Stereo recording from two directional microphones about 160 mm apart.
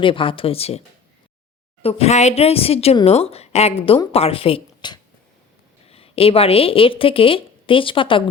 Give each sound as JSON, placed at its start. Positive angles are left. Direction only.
{"t": 0.0, "sound": "speech", "side_deg": 35}
{"t": 1.8, "sound": "speech", "side_deg": 40}